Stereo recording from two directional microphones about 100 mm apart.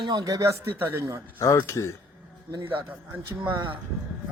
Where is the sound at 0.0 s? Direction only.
40° right (ahead or behind).